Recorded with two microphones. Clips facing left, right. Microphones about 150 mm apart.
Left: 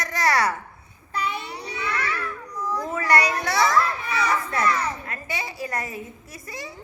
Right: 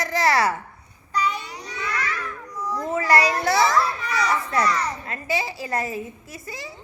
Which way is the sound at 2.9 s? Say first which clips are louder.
Right 3 dB; 25° right (ahead or behind).